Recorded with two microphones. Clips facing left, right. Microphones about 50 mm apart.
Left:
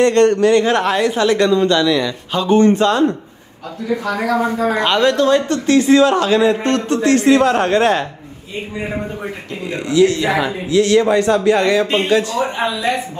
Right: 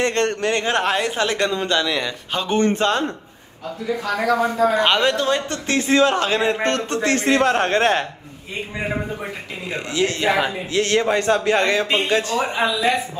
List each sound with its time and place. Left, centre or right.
0.0 s a man's voice: right
2.4 s a man's voice: right
4.6 s a man's voice: left
4.8 s a man's voice: right
5.7 s a man's voice: right
9.8 s a man's voice: right